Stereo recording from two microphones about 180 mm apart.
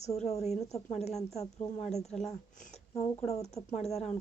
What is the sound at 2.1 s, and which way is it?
Speech, centre (ahead or behind).